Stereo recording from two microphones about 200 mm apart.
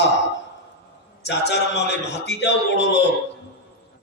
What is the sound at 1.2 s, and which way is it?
A man's voice, 60° left (ahead or behind).